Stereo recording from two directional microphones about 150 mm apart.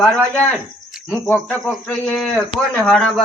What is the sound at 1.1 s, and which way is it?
A man's voice, 5° left (ahead or behind).